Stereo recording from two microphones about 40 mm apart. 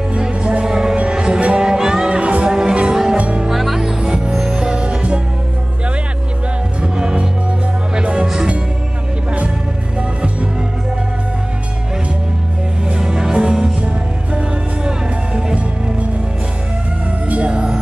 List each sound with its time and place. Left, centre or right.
0.1 s music: right
3.2 s music: right
3.4 s music: centre
4.0 s music: right
6.8 s music: right
9.9 s music: right
12.8 s music: centre
14.9 s music: right
17.3 s cat: right